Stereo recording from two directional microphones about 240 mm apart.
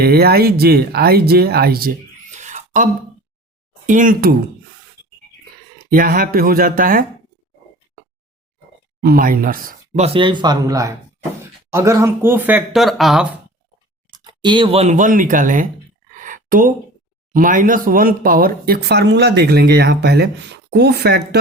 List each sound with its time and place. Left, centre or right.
0.0 s speech: right
2.3 s a sound: right
3.8 s speech: right
5.9 s speech: right
9.0 s speech: right; by 13.2 s centre
14.3 s speech: centre
16.1 s a sound: right
17.3 s speech: right